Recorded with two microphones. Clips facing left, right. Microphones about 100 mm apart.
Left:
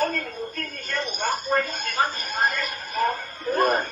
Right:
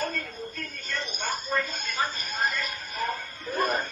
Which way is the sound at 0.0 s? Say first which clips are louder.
Left 6 dB; 55° left (ahead or behind).